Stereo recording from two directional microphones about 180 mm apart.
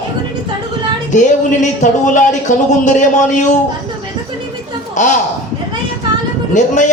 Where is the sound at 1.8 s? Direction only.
45° left (ahead or behind).